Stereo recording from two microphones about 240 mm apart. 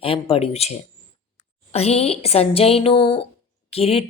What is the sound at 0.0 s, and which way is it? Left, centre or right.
Speech, left.